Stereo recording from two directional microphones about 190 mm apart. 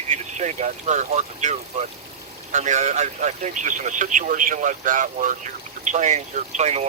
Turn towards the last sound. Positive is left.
turn(degrees=-35)  # may be behind; listen again after turning